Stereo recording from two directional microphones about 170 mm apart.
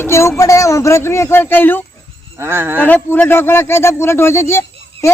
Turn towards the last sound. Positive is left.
turn(degrees=15)  # may be behind; listen again after turning